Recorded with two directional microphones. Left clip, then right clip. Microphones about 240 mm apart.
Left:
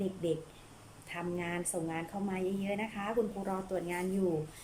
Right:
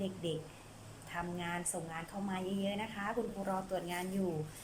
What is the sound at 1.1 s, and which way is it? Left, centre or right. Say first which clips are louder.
A woman's voice: left 2 dB; centre.